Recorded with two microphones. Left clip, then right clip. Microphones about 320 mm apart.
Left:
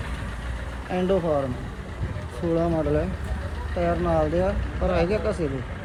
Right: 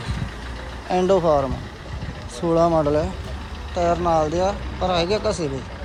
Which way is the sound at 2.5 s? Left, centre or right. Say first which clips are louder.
Right 6 dB; centre.